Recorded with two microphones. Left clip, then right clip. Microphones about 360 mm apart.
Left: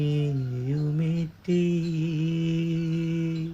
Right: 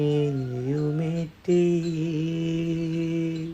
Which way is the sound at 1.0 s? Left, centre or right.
Centre.